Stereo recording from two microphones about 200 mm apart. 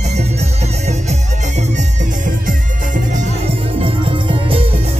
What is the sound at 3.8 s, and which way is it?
Music, 25° right (ahead or behind).